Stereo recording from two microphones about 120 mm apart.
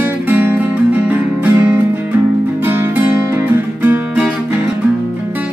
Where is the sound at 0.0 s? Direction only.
15° right (ahead or behind).